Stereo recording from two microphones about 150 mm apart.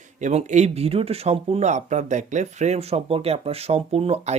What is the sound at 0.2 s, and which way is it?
Speech, 50° right (ahead or behind).